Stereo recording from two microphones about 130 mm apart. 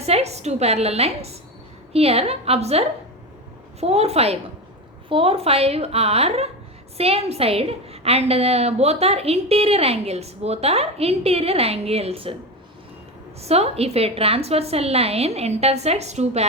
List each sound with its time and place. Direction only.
0.0 s a woman's voice: 55° right (ahead or behind)
13.4 s a woman's voice: 55° right (ahead or behind)